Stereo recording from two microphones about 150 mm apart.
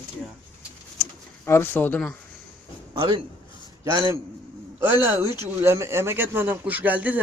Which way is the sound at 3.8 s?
20° right (ahead or behind).